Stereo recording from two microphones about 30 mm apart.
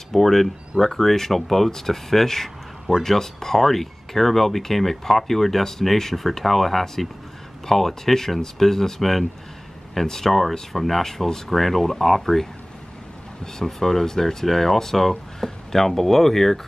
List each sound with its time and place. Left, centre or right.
0.1 s speech: centre
13.7 s speech: centre